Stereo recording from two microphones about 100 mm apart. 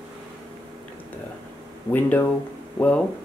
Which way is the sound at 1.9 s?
15° left (ahead or behind).